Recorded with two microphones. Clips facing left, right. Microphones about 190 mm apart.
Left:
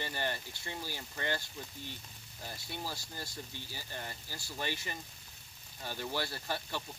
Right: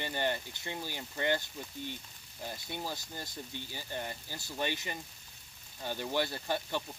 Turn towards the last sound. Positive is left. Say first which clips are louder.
# right 4 dB
turn(degrees=-20)  # may be behind; listen again after turning